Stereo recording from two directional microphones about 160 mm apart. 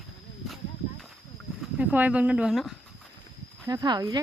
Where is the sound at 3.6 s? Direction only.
25° right (ahead or behind).